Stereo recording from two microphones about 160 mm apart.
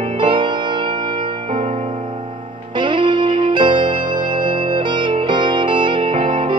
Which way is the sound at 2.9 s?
30° right (ahead or behind).